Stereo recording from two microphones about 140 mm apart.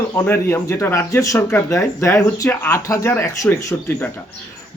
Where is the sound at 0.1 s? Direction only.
15° left (ahead or behind).